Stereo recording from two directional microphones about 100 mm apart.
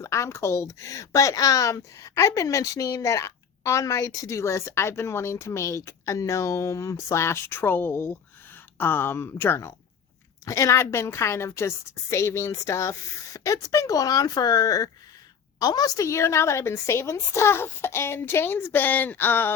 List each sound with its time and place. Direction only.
0.0 s speech: 30° left (ahead or behind)